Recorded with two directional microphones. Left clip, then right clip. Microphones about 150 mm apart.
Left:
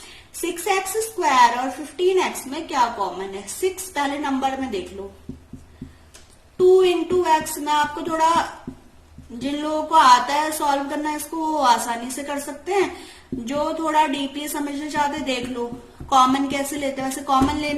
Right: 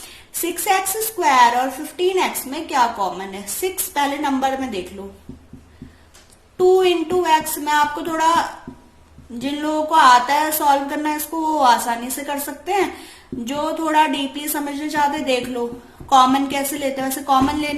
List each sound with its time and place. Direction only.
0.4 s a woman's voice: 40° right (ahead or behind)
6.7 s a woman's voice: 45° right (ahead or behind)
9.4 s music: 45° right (ahead or behind)
13.4 s a woman's voice: 40° right (ahead or behind)
14.2 s music: 40° right (ahead or behind)